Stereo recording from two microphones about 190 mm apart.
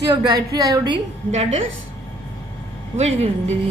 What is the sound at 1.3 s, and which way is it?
Speech, 35° right (ahead or behind).